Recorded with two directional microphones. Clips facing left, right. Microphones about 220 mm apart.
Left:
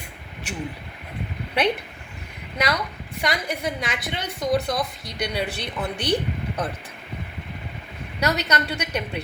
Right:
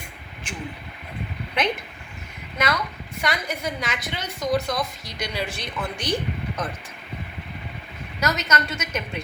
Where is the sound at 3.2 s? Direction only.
35° left (ahead or behind).